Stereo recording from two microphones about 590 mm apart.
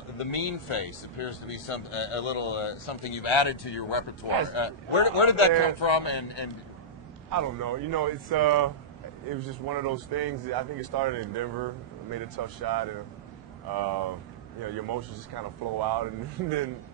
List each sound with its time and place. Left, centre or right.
0.2 s a man's voice: left
7.2 s speech: right
9.7 s speech: right